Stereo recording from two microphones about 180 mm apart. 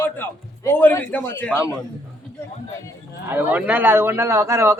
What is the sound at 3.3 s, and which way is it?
A man's voice, 10° right (ahead or behind).